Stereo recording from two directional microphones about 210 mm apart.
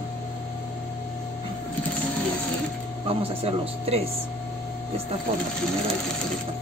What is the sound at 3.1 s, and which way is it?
Speech, 25° right (ahead or behind).